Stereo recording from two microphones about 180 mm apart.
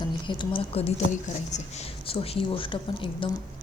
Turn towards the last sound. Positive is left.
turn(degrees=30)  # may be behind; listen again after turning